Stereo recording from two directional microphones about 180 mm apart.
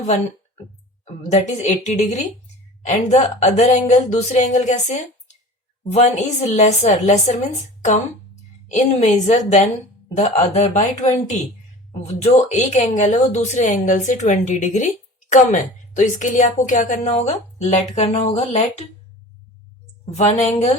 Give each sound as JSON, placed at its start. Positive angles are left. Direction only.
{"t": 1.0, "sound": "a woman's voice", "side_deg": 40}
{"t": 20.1, "sound": "a woman's voice", "side_deg": 40}